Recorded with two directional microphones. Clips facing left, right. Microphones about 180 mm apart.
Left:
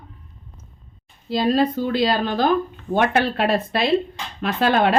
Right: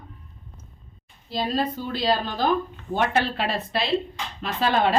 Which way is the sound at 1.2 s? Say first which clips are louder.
Left 7 dB; 75° left (ahead or behind).